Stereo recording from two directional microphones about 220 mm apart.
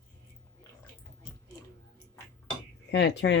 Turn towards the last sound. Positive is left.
turn(degrees=50)  # may be behind; listen again after turning